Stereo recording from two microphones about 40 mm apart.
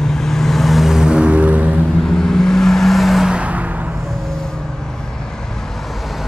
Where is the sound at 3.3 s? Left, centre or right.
Right.